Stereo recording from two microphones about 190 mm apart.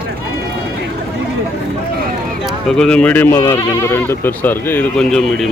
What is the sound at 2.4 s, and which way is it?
Speech, 5° left (ahead or behind).